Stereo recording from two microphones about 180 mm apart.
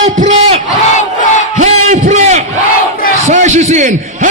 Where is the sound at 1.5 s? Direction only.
40° right (ahead or behind).